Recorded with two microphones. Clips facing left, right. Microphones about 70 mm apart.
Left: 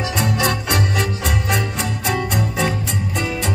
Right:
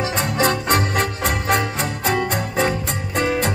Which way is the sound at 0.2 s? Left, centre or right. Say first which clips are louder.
Even; right.